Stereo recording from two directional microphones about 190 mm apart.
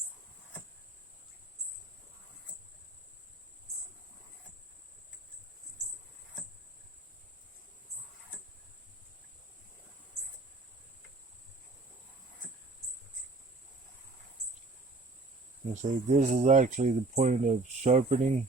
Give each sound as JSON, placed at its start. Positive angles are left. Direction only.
{"t": 15.6, "sound": "speech", "side_deg": -40}